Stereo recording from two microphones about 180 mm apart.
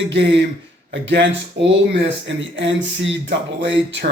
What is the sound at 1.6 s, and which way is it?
Speech, 70° right (ahead or behind).